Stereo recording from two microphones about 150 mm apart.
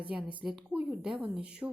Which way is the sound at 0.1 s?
5° right (ahead or behind).